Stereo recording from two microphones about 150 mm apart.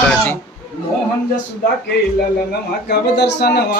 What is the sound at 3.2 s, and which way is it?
Speech, 90° left.